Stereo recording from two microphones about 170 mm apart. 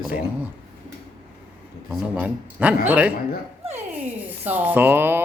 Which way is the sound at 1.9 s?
10° right (ahead or behind).